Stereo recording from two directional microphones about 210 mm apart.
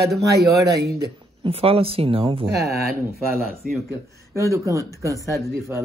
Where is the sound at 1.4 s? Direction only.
25° right (ahead or behind).